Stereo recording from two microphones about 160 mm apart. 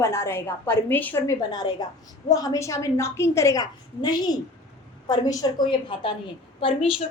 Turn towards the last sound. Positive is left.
turn(degrees=35)  # may be behind; listen again after turning